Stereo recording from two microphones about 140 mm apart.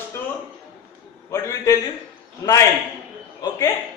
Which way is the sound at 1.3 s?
20° left (ahead or behind).